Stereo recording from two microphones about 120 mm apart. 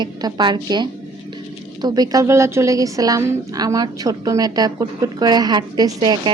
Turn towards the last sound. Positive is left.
turn(degrees=-35)  # may be behind; listen again after turning